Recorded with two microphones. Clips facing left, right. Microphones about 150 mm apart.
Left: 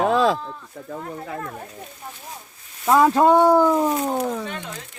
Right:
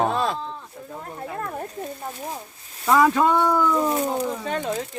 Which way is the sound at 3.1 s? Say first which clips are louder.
Left 5 dB; 40° left (ahead or behind).